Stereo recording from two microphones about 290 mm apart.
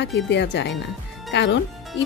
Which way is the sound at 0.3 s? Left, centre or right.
Left.